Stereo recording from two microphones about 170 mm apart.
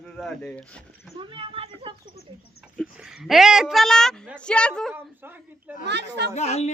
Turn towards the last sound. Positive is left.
turn(degrees=40)  # may be behind; listen again after turning